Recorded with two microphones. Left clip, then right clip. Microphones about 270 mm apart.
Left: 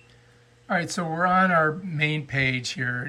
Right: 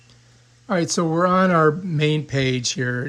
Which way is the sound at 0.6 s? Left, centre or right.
Centre.